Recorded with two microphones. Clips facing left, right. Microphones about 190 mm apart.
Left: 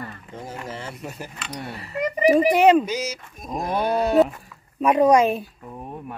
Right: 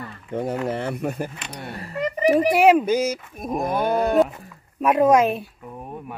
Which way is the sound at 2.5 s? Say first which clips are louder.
Right 2 dB; 5° right (ahead or behind).